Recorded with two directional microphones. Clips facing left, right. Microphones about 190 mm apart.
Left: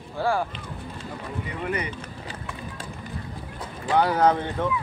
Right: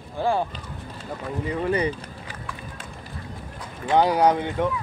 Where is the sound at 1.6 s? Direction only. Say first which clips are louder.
Right 5 dB; 30° right (ahead or behind).